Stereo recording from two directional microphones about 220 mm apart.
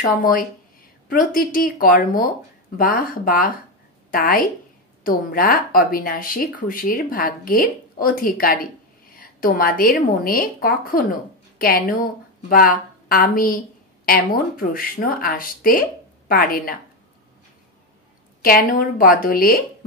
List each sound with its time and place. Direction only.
1.0 s a woman's voice: 40° left (ahead or behind)
18.4 s speech: 40° left (ahead or behind)